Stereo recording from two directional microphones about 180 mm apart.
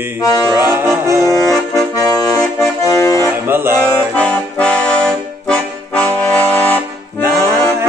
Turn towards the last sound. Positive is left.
turn(degrees=-15)  # may be behind; listen again after turning